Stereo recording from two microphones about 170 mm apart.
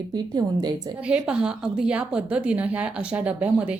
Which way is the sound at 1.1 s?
5° right (ahead or behind).